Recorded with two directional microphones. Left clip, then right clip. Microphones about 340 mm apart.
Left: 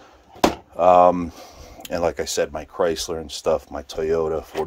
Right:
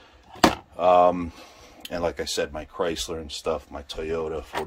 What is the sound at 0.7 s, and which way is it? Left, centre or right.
Speech, centre.